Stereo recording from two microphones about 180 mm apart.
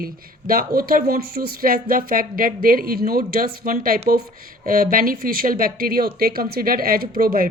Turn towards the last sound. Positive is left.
turn(degrees=-55)  # may be behind; listen again after turning